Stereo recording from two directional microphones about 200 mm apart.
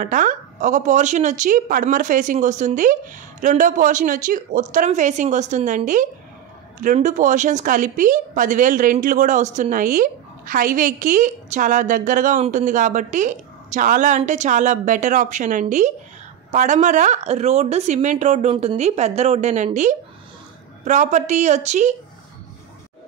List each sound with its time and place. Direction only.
0.0 s speech: 40° right (ahead or behind)